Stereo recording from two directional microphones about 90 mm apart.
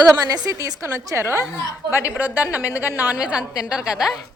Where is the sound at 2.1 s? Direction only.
20° right (ahead or behind).